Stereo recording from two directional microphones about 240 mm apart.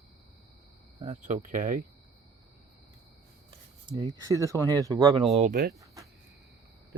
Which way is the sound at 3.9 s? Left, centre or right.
Centre.